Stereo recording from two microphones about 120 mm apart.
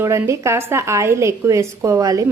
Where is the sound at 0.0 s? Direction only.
25° right (ahead or behind).